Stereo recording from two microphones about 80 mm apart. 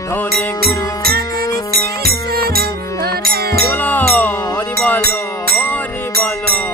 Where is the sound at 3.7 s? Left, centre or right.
Left.